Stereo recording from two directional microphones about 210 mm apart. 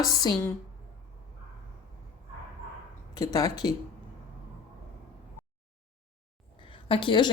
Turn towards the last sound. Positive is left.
turn(degrees=20)  # may be behind; listen again after turning